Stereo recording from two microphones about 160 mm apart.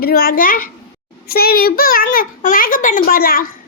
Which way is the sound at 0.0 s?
65° left (ahead or behind).